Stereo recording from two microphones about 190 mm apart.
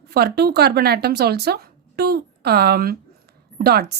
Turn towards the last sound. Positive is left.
turn(degrees=-60)  # may be behind; listen again after turning